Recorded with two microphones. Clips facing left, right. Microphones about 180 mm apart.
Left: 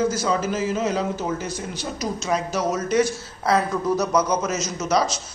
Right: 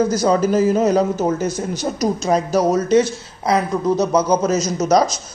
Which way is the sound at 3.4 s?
15° right (ahead or behind).